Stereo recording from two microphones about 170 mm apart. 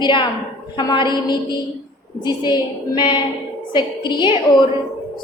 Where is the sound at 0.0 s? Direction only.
30° left (ahead or behind).